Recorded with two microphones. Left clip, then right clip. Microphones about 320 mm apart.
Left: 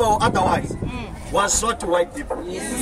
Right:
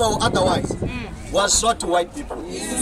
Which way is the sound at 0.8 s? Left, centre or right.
Centre.